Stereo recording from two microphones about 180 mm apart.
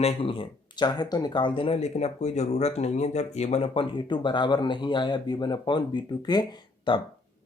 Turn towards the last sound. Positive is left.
turn(degrees=25)  # may be behind; listen again after turning